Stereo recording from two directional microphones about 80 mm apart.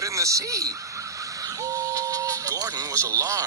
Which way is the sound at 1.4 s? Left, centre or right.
Right.